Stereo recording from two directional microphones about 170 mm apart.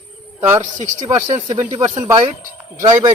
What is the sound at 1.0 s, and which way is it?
Speech, 15° right (ahead or behind).